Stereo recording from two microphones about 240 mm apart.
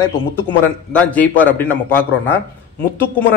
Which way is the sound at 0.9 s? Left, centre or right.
Centre.